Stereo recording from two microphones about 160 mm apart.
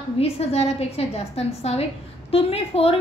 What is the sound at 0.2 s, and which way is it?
A woman's voice, 40° left (ahead or behind).